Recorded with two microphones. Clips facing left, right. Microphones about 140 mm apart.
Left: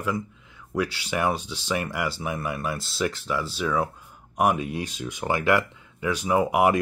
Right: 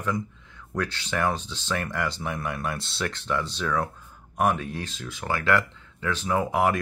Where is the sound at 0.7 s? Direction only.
10° left (ahead or behind).